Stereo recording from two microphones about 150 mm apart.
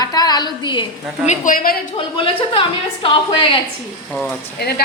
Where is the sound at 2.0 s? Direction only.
35° left (ahead or behind).